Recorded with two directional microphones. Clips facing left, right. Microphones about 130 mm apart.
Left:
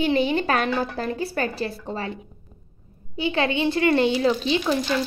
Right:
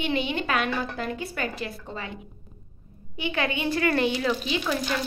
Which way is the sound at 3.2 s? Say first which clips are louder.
Left 5 dB; 30° left (ahead or behind).